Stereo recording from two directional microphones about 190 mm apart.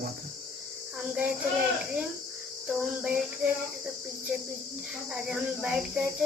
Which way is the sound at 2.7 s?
10° right (ahead or behind).